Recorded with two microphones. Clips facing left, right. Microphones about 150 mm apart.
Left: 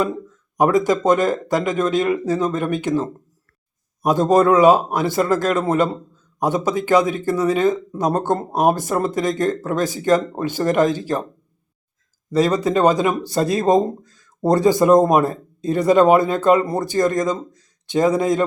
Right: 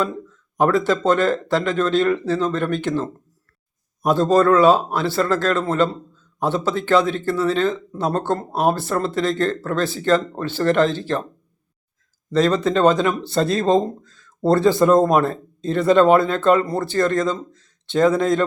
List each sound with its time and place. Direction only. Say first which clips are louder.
0.0 s speech: left 2 dB; 15° left (ahead or behind)
12.3 s speech: even; 10° left (ahead or behind)